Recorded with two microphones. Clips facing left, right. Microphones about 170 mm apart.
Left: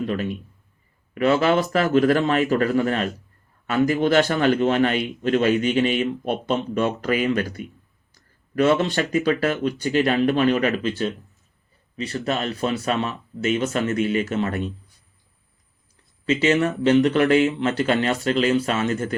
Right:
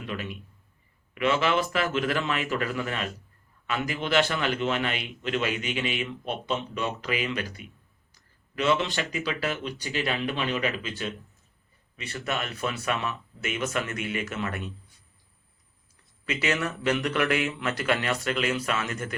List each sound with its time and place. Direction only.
0.0 s speech: 40° left (ahead or behind)
11.9 s speech: 30° left (ahead or behind)
16.2 s speech: 30° left (ahead or behind)